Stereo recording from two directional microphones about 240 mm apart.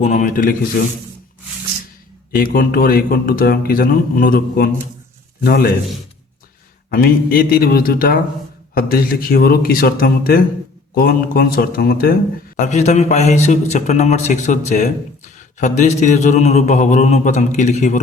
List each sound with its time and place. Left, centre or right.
0.0 s speech: left
2.3 s speech: left
6.9 s a man's voice: left